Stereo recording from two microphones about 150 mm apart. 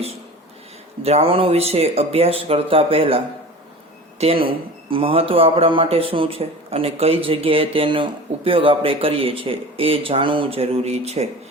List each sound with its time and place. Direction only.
1.0 s speech: 40° right (ahead or behind)